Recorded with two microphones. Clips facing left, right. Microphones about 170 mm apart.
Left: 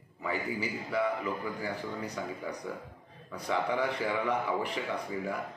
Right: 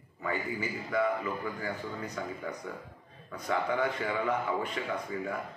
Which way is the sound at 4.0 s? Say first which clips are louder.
Even; 10° left (ahead or behind).